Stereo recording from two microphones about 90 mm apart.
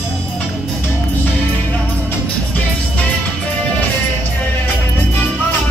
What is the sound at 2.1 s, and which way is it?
Music, 15° left (ahead or behind).